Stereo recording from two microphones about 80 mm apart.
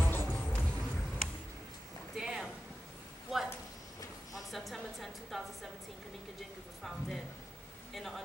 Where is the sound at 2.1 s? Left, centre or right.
Centre.